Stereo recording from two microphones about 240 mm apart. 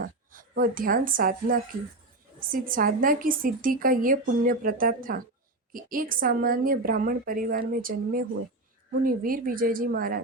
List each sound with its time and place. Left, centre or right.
0.0 s a woman's voice: right